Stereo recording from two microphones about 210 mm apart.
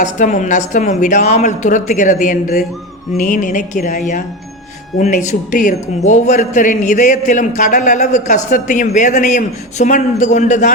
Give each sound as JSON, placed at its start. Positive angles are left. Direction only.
{"t": 0.0, "sound": "a man's voice", "side_deg": 35}